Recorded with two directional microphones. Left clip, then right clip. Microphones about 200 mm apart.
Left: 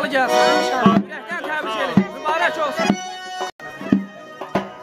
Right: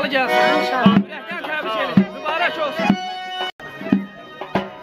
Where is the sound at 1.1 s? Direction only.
20° left (ahead or behind); by 3.5 s 40° left (ahead or behind).